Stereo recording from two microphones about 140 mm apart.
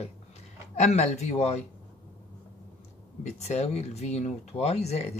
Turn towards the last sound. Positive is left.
turn(degrees=50)  # may be behind; listen again after turning